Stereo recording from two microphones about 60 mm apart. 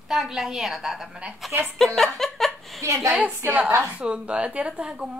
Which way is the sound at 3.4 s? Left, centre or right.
Right.